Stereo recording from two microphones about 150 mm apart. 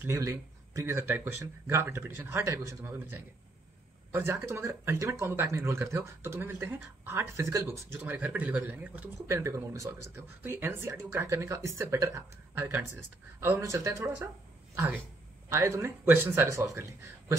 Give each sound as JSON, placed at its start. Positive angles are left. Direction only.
{"t": 0.0, "sound": "speech", "side_deg": -15}
{"t": 15.5, "sound": "speech", "side_deg": -15}